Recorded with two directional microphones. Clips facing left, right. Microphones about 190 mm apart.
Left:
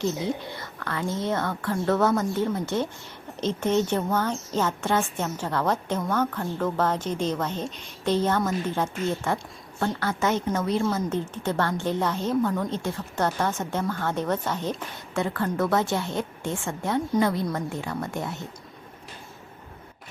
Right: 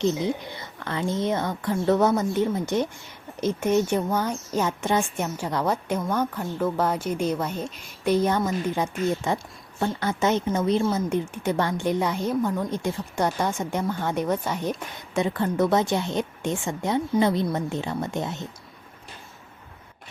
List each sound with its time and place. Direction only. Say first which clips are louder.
0.0 s a woman's voice: right 3 dB; 20° right (ahead or behind)